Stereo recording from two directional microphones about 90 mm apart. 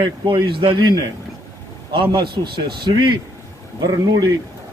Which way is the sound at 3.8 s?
50° right (ahead or behind).